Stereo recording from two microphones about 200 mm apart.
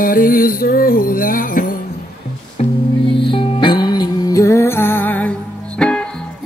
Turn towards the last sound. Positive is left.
turn(degrees=5)  # may be behind; listen again after turning